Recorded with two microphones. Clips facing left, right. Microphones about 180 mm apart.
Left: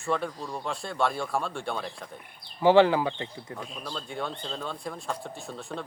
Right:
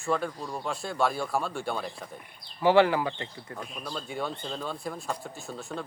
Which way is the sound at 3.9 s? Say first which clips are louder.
Right 1 dB; 5° right (ahead or behind).